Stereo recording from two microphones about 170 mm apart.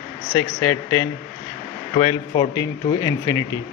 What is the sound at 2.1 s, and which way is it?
Speech, 25° left (ahead or behind).